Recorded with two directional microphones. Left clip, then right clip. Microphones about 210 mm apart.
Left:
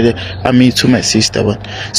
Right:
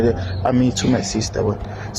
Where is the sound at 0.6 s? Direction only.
55° left (ahead or behind).